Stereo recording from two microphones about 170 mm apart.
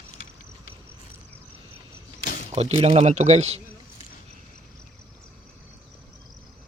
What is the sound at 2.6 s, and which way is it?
Speech, 35° right (ahead or behind).